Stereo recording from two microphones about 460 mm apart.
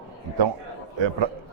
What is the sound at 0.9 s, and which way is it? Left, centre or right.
Speech, right.